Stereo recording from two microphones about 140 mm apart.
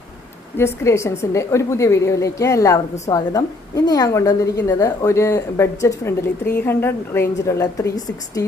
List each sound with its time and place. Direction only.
0.5 s a woman's voice: 20° left (ahead or behind)